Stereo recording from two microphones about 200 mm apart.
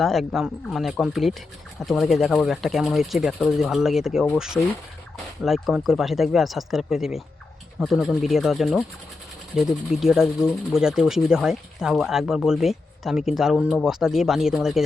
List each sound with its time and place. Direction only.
0.0 s speech: centre (ahead or behind)